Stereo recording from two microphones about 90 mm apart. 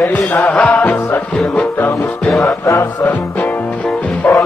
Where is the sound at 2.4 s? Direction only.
35° left (ahead or behind).